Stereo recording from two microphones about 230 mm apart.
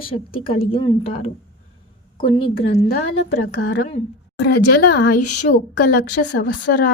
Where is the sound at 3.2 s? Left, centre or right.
Left.